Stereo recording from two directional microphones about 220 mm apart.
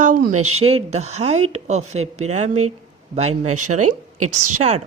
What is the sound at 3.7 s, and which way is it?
Speech, 90° right.